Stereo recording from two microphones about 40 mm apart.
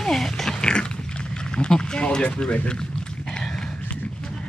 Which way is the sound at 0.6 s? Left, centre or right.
Left.